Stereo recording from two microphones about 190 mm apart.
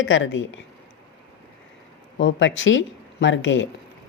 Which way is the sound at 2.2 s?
75° left (ahead or behind).